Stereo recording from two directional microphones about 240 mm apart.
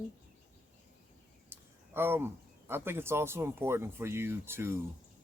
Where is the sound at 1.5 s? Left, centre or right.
Centre.